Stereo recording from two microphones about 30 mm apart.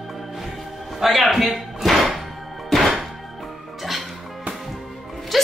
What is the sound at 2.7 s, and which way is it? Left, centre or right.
Thunk, centre.